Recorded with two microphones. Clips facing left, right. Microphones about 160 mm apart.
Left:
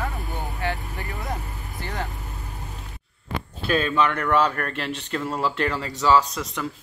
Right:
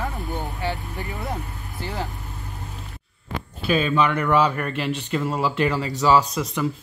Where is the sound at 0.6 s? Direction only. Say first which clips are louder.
Right 1 dB; 20° right (ahead or behind).